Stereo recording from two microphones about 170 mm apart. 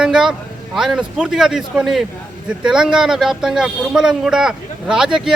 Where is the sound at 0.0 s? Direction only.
5° right (ahead or behind).